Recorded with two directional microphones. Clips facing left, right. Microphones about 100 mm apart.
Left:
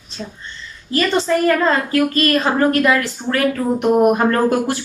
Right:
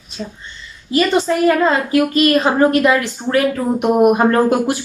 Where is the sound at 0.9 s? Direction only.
15° right (ahead or behind).